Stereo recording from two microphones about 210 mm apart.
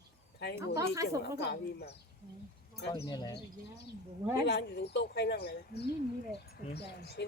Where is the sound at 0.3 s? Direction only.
55° left (ahead or behind).